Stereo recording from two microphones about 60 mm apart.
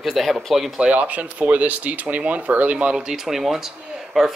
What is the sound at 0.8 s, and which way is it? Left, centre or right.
Speech, right.